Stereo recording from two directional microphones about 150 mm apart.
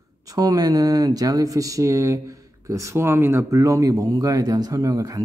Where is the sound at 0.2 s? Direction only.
25° right (ahead or behind).